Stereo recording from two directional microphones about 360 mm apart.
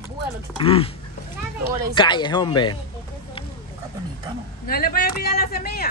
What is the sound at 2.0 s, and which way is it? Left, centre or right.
Speech, centre.